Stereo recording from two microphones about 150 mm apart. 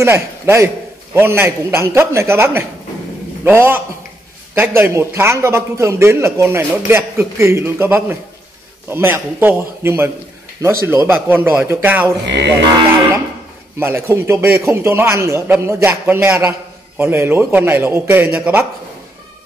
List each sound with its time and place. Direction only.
0.0 s a man's voice: 15° right (ahead or behind)
13.7 s a man's voice: 15° right (ahead or behind)